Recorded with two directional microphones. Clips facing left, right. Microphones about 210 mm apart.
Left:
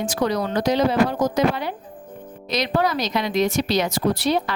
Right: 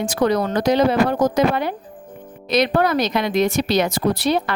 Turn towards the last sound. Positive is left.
turn(degrees=-55)  # may be behind; listen again after turning